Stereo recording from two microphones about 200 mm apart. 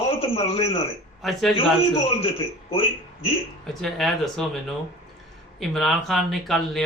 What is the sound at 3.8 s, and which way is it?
Speech, centre (ahead or behind).